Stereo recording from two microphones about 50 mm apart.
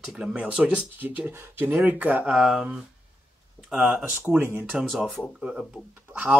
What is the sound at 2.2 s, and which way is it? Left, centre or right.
Speech, centre.